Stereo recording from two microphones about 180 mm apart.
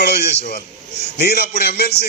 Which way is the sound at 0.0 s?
65° left (ahead or behind).